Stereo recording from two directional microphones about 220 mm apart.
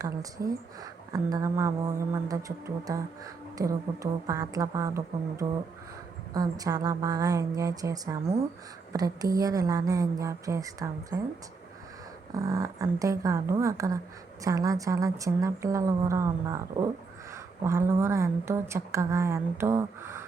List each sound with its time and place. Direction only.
0.0 s a woman's voice: 15° right (ahead or behind)
12.4 s a woman's voice: 15° right (ahead or behind)